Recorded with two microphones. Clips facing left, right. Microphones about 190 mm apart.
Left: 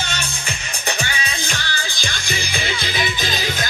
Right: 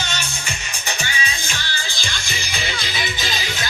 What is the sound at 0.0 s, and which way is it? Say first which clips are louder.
Music: left 1 dB; 55° left (ahead or behind).